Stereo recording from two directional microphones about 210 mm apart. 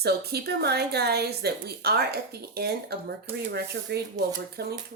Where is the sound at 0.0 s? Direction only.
50° right (ahead or behind).